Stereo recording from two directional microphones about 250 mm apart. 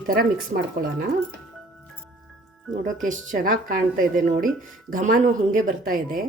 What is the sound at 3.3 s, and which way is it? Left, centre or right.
Speech, right.